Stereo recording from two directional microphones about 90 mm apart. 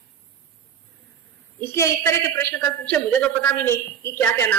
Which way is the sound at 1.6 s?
30° left (ahead or behind).